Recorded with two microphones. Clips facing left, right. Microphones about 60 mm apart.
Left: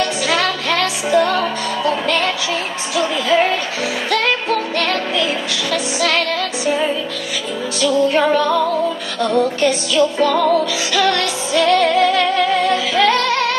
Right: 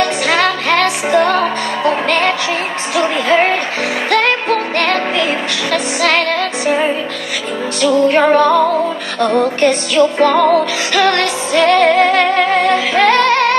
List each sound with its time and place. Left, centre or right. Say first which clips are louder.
0.0 s music: right 4 dB; right